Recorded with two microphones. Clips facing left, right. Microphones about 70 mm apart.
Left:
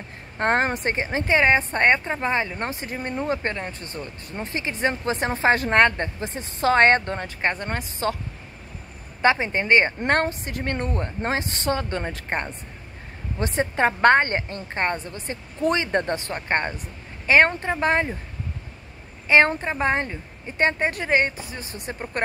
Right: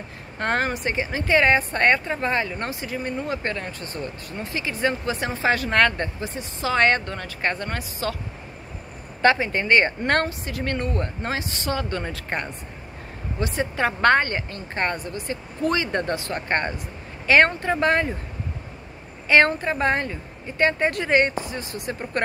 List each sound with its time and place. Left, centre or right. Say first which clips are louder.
0.4 s a woman's voice: left 2 dB; left
6.6 s a woman's voice: left 3 dB; left
9.4 s a woman's voice: even; left
11.8 s a woman's voice: even; left
19.2 s a woman's voice: even; centre